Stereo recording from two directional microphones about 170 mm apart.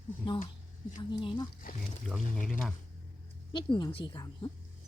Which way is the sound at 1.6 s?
50° left (ahead or behind).